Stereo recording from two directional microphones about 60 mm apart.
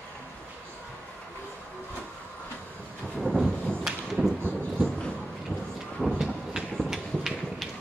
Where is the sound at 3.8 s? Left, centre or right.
Centre.